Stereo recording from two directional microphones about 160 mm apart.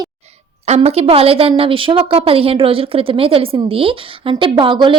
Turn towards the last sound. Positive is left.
turn(degrees=-30)  # may be behind; listen again after turning